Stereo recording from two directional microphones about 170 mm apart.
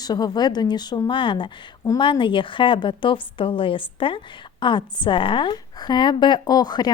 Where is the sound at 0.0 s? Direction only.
25° left (ahead or behind).